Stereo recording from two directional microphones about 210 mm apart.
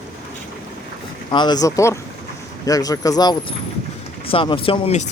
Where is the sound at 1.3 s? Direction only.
20° left (ahead or behind).